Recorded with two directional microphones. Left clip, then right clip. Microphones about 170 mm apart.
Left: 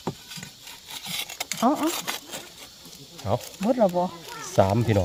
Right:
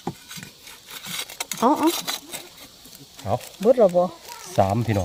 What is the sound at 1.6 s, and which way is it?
Speech, 85° right.